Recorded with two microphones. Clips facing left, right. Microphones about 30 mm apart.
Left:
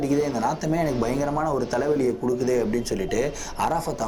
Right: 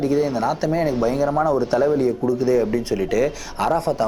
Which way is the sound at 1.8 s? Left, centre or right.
Centre.